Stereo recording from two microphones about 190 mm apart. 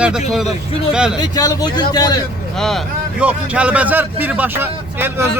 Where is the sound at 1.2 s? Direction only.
20° left (ahead or behind).